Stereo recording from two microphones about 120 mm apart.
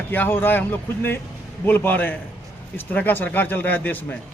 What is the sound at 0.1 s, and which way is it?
A man's voice, 15° left (ahead or behind).